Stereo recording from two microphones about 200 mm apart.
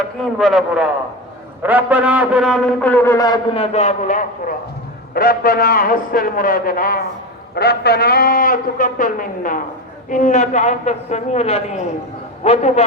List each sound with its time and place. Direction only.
0.2 s a man's voice: centre (ahead or behind); by 12.8 s 30° left (ahead or behind)